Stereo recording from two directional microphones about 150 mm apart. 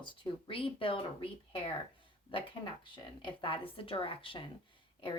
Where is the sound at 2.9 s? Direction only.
35° left (ahead or behind).